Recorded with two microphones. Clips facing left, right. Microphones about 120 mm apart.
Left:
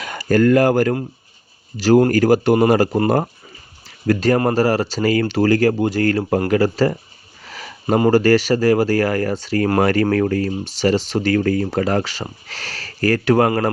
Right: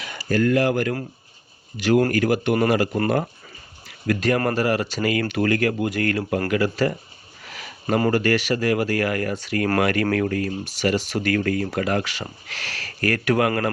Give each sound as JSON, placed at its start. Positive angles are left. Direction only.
{"t": 0.0, "sound": "speech", "side_deg": 45}